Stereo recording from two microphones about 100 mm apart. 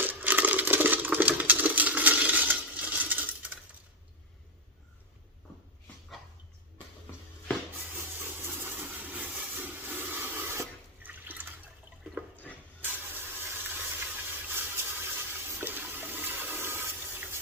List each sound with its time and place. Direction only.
0.0 s coin: 20° right (ahead or behind)
7.9 s a sound: 20° right (ahead or behind)
12.8 s vehicle: 20° right (ahead or behind)
14.5 s toilet flush: 20° right (ahead or behind)